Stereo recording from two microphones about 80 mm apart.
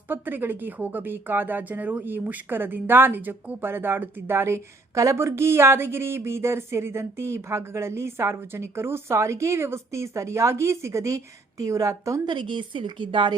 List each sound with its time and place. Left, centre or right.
0.1 s speech: right
12.2 s speech: right